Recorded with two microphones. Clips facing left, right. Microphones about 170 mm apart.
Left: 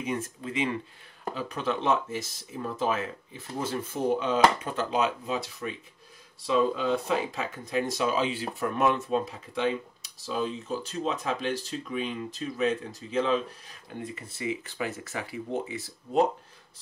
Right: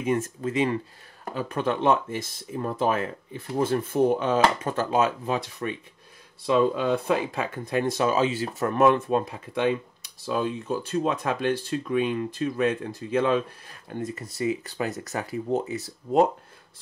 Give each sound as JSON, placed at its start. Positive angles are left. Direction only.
{"t": 0.0, "sound": "speech", "side_deg": -45}